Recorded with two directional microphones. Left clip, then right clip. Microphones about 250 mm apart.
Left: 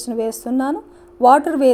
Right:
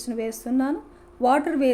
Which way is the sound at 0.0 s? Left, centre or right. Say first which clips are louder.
Left 7 dB; centre.